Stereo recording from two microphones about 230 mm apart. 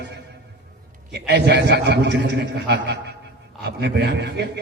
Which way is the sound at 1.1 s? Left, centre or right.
Right.